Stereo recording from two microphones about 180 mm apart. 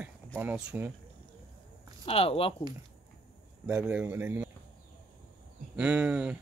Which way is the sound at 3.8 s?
10° right (ahead or behind).